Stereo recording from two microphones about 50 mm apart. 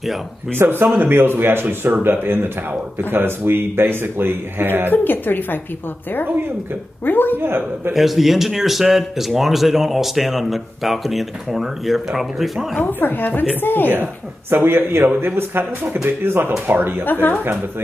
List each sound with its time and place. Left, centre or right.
0.6 s a man's voice: right
0.8 s speech: right
1.1 s a man's voice: right
4.9 s a woman's voice: left
7.1 s a woman's voice: left
7.3 s a man's voice: right
7.9 s a man's voice: centre
12.8 s a woman's voice: left
14.5 s a man's voice: right
17.0 s a woman's voice: left